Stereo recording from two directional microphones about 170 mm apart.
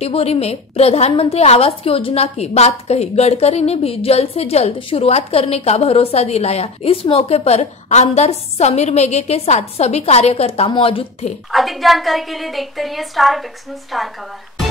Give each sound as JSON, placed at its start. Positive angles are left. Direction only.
{"t": 0.0, "sound": "a woman's voice", "side_deg": 35}
{"t": 11.5, "sound": "a woman's voice", "side_deg": 0}